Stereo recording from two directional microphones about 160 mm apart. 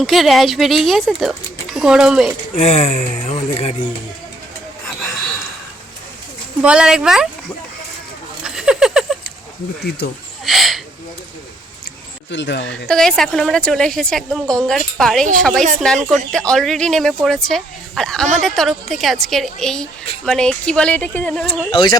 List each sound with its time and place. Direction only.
0.0 s a woman's voice: centre (ahead or behind)
2.6 s speech: 45° left (ahead or behind)
4.9 s a sound: centre (ahead or behind)
6.6 s a woman's voice: 5° right (ahead or behind)
8.4 s a sound: 5° right (ahead or behind)
10.0 s speech: 85° left
10.4 s a sound: centre (ahead or behind)
12.4 s speech: 90° left
12.9 s a woman's voice: 5° left (ahead or behind)
21.7 s speech: 30° left (ahead or behind)